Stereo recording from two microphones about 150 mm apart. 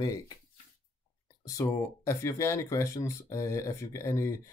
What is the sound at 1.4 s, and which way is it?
Speech, 20° left (ahead or behind).